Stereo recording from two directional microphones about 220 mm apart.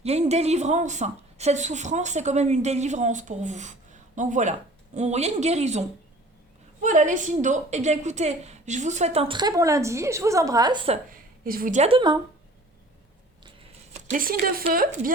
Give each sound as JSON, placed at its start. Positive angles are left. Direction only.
{"t": 0.0, "sound": "speech", "side_deg": -30}
{"t": 6.8, "sound": "a woman's voice", "side_deg": -35}
{"t": 11.4, "sound": "a woman's voice", "side_deg": -40}
{"t": 13.9, "sound": "speech", "side_deg": -35}